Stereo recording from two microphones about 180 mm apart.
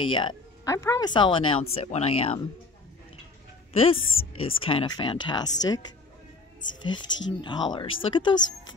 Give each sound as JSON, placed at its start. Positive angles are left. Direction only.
{"t": 0.0, "sound": "speech", "side_deg": 30}
{"t": 3.8, "sound": "speech", "side_deg": 30}
{"t": 7.0, "sound": "speech", "side_deg": 90}
{"t": 7.4, "sound": "speech", "side_deg": 25}